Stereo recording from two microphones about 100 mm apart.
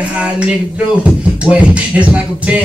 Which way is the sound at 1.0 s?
10° right (ahead or behind).